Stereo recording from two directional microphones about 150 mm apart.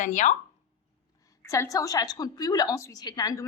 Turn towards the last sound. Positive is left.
turn(degrees=25)  # may be behind; listen again after turning